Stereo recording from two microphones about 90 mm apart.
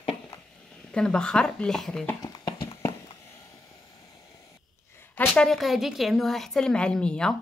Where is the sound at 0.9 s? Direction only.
10° left (ahead or behind).